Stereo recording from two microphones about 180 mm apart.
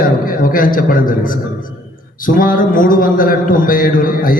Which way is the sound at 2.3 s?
50° left (ahead or behind).